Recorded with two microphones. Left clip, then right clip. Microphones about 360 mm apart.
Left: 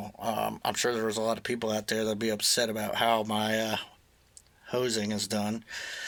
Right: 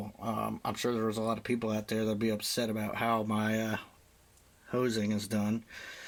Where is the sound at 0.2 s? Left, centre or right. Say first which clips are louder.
Left 5 dB; left.